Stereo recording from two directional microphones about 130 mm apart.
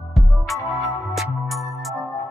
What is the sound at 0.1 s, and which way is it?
Music, centre (ahead or behind).